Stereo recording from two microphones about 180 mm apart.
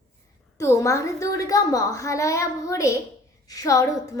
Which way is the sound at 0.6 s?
15° left (ahead or behind).